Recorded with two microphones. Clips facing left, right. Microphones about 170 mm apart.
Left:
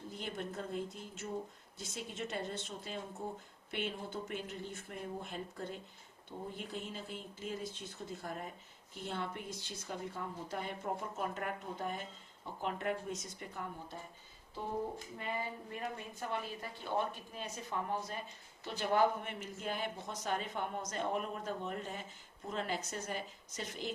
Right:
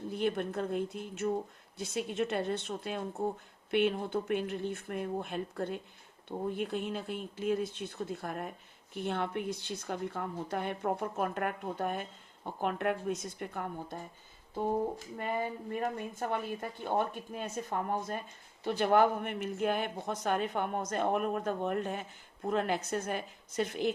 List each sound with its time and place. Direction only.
0.1 s speech: 60° right (ahead or behind)
15.2 s a woman's voice: 50° right (ahead or behind)